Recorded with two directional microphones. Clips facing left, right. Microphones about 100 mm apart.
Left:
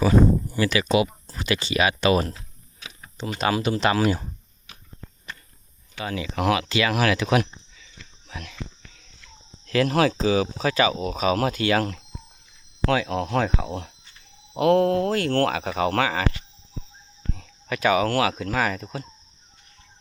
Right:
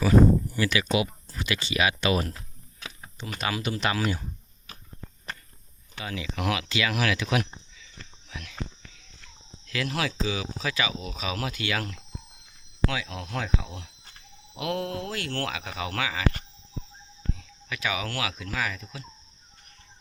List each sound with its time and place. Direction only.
0.0 s speech: 25° left (ahead or behind)
6.1 s speech: 40° left (ahead or behind)
9.6 s speech: 45° left (ahead or behind)
17.3 s speech: 45° left (ahead or behind)